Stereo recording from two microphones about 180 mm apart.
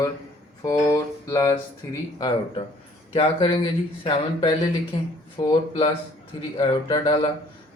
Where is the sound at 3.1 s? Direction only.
30° left (ahead or behind).